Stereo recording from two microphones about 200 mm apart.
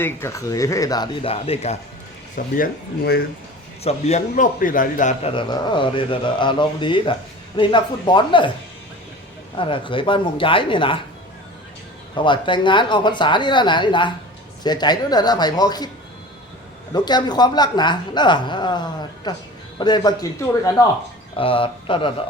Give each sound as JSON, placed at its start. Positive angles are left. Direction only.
{"t": 0.0, "sound": "speech", "side_deg": 15}
{"t": 2.3, "sound": "speech", "side_deg": 45}
{"t": 3.8, "sound": "a man's voice", "side_deg": 35}
{"t": 5.3, "sound": "speech", "side_deg": 25}
{"t": 9.6, "sound": "speech", "side_deg": 25}
{"t": 12.1, "sound": "speech", "side_deg": 25}
{"t": 16.9, "sound": "speech", "side_deg": 20}
{"t": 21.3, "sound": "speech", "side_deg": 25}